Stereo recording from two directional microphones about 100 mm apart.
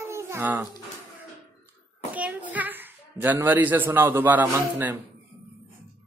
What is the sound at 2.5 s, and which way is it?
Speech, 20° right (ahead or behind).